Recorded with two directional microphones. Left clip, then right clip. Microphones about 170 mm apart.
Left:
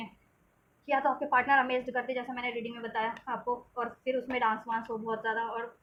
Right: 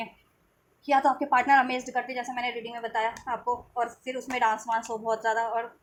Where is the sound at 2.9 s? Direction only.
35° right (ahead or behind).